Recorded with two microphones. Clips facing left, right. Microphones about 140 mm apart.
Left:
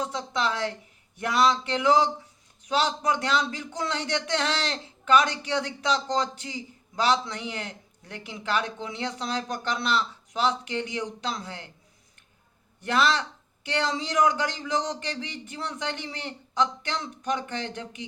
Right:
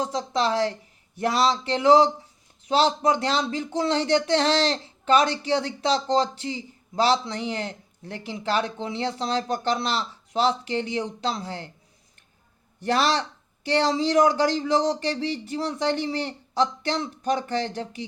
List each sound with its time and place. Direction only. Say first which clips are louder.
0.0 s speech: right 4 dB; 35° right (ahead or behind)
12.8 s speech: right 2 dB; 35° right (ahead or behind)